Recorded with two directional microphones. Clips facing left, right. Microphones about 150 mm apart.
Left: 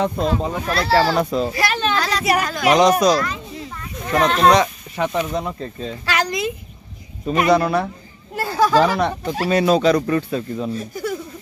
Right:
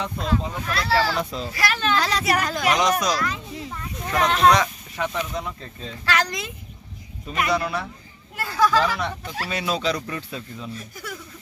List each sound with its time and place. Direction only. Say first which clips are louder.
0.0 s speech: left 6 dB; 40° left (ahead or behind)
1.1 s speech: left 8 dB; 50° left (ahead or behind)
1.5 s speech: left 3 dB; 25° left (ahead or behind)
2.0 s a woman's voice: left 2 dB; 25° right (ahead or behind)
2.2 s speech: left 4 dB; 10° left (ahead or behind)
2.7 s speech: left 9 dB; 35° left (ahead or behind)
3.2 s speech: left 4 dB; 5° right (ahead or behind)
4.5 s speech: left 4 dB; 30° left (ahead or behind)
6.0 s speech: left 3 dB; 10° left (ahead or behind)
7.2 s speech: left 8 dB; 40° left (ahead or behind)
8.4 s speech: left 5 dB; 30° left (ahead or behind)
8.9 s speech: left 8 dB; 45° left (ahead or behind)
10.7 s speech: left 11 dB; 30° left (ahead or behind)